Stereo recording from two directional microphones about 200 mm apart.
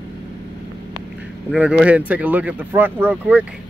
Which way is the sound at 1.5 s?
5° right (ahead or behind).